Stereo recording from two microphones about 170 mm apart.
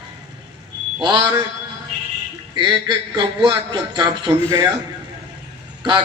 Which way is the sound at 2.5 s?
25° right (ahead or behind).